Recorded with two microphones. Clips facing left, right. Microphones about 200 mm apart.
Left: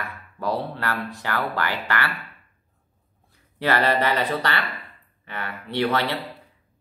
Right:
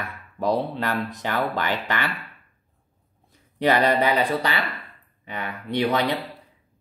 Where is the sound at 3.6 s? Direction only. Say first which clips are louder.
Right 2 dB; 15° right (ahead or behind).